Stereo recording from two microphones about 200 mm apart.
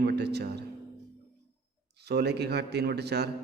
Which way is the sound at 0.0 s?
55° right (ahead or behind).